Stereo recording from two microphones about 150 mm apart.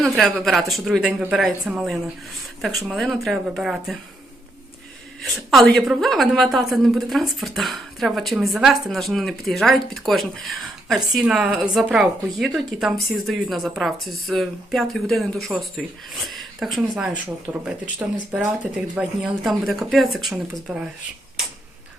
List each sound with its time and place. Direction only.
0.0 s a woman's voice: centre (ahead or behind)
5.2 s a woman's voice: centre (ahead or behind)
17.5 s a woman's voice: 10° right (ahead or behind)